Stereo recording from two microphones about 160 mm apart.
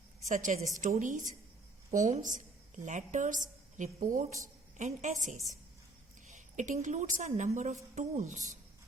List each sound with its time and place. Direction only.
0.3 s a woman's voice: 50° right (ahead or behind)
6.2 s a sound: 50° right (ahead or behind)
6.8 s a woman's voice: 50° right (ahead or behind)